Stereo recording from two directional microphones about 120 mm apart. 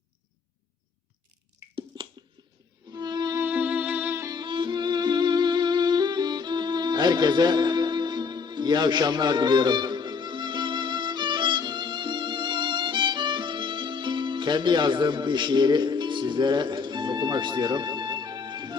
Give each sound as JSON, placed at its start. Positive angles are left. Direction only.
{"t": 3.0, "sound": "music", "side_deg": -35}
{"t": 3.3, "sound": "music", "side_deg": -15}
{"t": 4.3, "sound": "music", "side_deg": -40}